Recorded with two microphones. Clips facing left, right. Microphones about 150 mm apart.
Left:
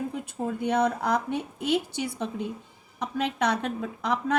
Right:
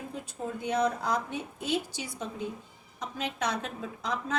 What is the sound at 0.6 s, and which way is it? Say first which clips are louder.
A woman's voice: left 3 dB; 60° left (ahead or behind).